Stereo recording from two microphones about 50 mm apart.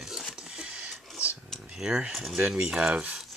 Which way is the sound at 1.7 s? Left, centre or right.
Centre.